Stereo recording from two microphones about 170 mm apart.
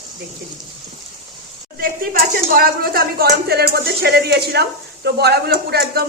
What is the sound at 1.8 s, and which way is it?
Speech, 60° right (ahead or behind).